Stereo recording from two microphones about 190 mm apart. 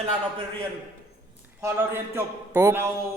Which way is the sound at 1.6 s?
15° right (ahead or behind).